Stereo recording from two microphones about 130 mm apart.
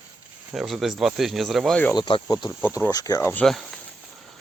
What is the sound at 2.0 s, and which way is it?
Speech, 35° left (ahead or behind).